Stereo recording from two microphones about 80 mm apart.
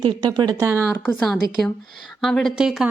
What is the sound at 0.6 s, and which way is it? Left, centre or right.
Speech, right.